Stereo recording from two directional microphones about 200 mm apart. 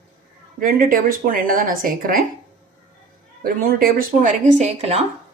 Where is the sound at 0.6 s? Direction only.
45° right (ahead or behind).